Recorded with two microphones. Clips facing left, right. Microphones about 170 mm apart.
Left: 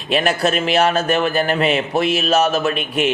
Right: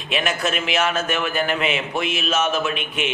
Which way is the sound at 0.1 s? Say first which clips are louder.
Left 6 dB; 35° left (ahead or behind).